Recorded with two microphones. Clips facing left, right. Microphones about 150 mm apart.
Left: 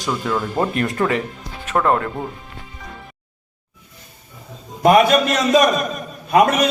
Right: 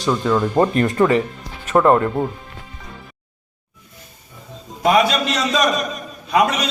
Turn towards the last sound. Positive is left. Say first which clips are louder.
# left 3 dB
turn(degrees=50)  # may be behind; listen again after turning